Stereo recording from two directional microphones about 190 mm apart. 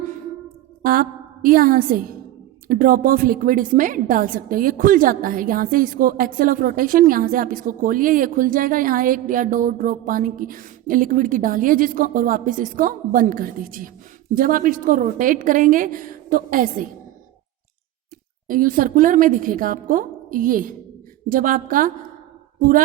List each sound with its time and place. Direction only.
0.8 s a woman's voice: 50° right (ahead or behind)
18.4 s a woman's voice: 45° right (ahead or behind)